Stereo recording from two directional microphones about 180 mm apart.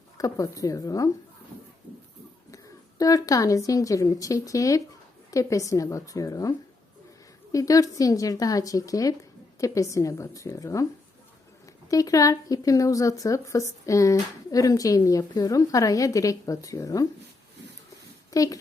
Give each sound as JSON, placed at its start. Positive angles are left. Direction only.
{"t": 0.2, "sound": "speech", "side_deg": 20}
{"t": 3.0, "sound": "a woman's voice", "side_deg": 20}
{"t": 11.9, "sound": "speech", "side_deg": 20}
{"t": 18.3, "sound": "speech", "side_deg": 20}